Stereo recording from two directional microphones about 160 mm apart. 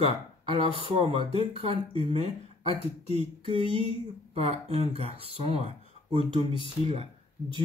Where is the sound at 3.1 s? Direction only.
35° right (ahead or behind).